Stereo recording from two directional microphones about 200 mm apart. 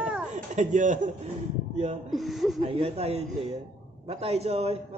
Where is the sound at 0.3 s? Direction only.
40° right (ahead or behind).